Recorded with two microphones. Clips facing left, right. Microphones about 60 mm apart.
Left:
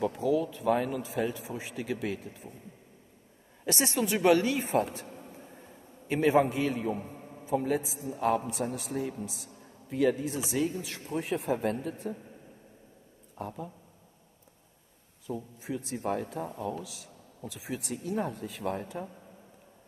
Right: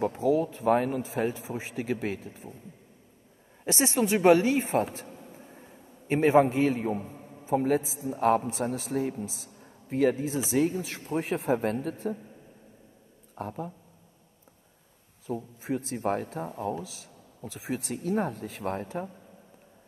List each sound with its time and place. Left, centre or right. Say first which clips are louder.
0.0 s speech: right 3 dB; right
3.6 s a woman's voice: right 3 dB; right
6.0 s a man's voice: right 3 dB; right
7.4 s a man's voice: right 4 dB; right
13.3 s speech: right 3 dB; right
15.2 s a man's voice: right 4 dB; right